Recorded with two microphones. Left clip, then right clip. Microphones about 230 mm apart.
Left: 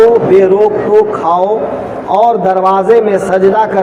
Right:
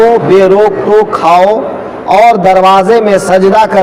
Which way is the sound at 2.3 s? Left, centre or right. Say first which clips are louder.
Right 5 dB; right.